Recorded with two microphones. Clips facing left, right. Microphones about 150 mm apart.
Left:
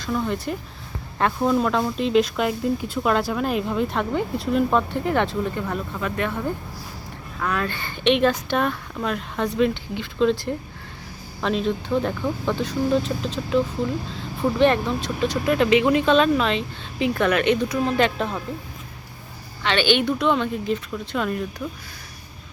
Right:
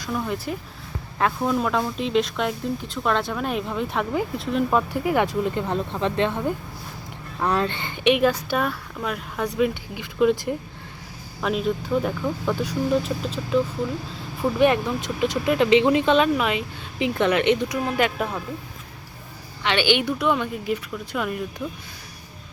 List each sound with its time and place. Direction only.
0.0 s speech: 5° right (ahead or behind)
14.4 s speech: centre (ahead or behind)
15.0 s speech: 20° right (ahead or behind)
19.6 s speech: 15° right (ahead or behind)